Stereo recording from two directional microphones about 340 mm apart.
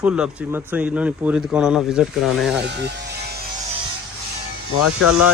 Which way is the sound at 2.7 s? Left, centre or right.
Right.